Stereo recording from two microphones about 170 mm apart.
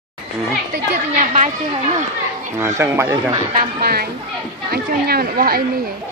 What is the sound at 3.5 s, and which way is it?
Speech, 60° right (ahead or behind).